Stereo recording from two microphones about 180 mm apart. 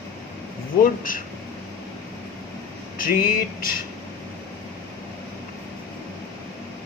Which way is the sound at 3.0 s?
50° left (ahead or behind).